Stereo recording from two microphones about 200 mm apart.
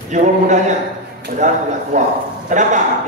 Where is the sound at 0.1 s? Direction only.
35° right (ahead or behind).